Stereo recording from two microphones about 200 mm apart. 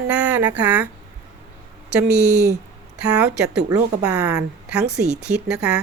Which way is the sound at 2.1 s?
55° right (ahead or behind).